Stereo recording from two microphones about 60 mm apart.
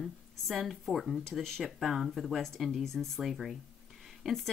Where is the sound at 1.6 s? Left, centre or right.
Centre.